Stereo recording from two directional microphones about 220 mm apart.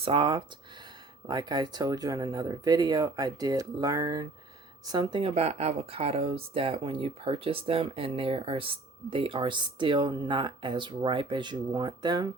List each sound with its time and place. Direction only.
0.0 s speech: 25° right (ahead or behind)